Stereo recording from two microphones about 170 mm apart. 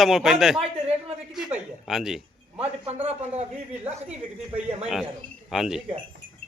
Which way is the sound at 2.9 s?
40° right (ahead or behind).